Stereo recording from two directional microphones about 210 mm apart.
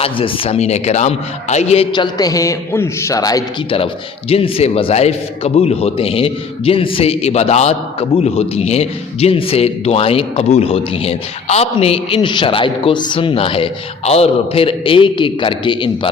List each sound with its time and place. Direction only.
0.0 s a man's voice: 25° left (ahead or behind)